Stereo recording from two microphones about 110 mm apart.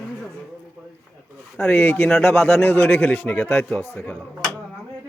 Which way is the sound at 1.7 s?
20° left (ahead or behind).